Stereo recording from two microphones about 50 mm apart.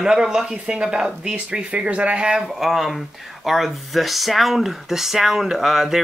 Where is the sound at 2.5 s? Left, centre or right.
Centre.